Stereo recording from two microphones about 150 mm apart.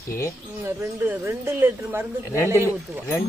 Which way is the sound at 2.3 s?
20° left (ahead or behind).